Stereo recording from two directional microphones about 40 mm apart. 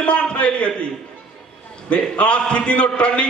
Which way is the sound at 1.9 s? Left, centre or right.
Left.